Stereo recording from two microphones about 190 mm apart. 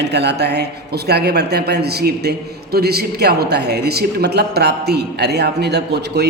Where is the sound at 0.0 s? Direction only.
60° right (ahead or behind).